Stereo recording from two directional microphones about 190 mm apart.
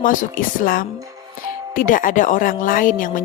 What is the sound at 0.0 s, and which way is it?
A woman's voice, 45° left (ahead or behind).